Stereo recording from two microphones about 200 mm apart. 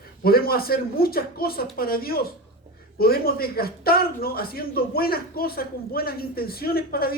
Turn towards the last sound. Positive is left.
turn(degrees=50)  # may be behind; listen again after turning